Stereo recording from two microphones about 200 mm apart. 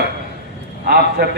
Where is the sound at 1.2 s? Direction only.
55° right (ahead or behind).